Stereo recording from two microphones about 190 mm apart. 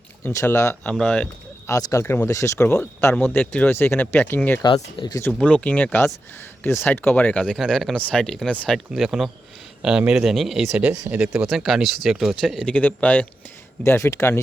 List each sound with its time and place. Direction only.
0.2 s speech: 10° left (ahead or behind)
0.9 s speech: 5° left (ahead or behind)
1.6 s speech: 15° left (ahead or behind)
4.6 s speech: 25° left (ahead or behind)
5.3 s speech: 5° left (ahead or behind)